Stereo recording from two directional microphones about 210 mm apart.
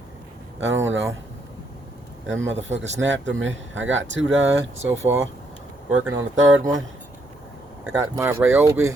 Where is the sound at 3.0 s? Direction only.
60° right (ahead or behind).